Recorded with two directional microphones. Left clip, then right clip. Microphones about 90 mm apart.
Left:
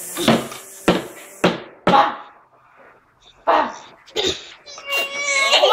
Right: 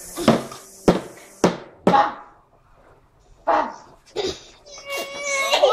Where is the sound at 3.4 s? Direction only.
15° left (ahead or behind).